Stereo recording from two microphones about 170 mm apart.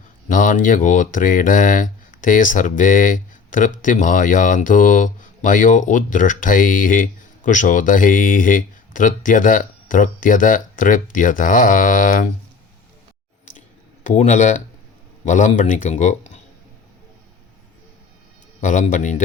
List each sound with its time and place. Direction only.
0.3 s speech: 50° left (ahead or behind)
14.0 s speech: 45° left (ahead or behind)
18.6 s speech: 50° left (ahead or behind)